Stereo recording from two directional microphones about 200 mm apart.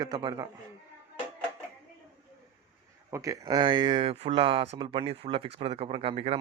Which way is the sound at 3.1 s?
15° right (ahead or behind).